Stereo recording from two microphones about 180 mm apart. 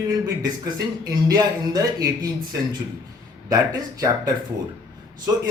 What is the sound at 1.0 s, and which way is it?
A man's voice, 20° right (ahead or behind).